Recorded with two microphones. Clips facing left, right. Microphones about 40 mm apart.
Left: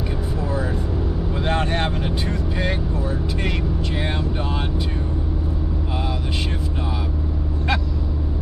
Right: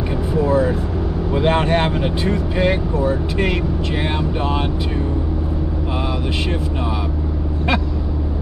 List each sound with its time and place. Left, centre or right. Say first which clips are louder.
1.3 s speech: right 7 dB; right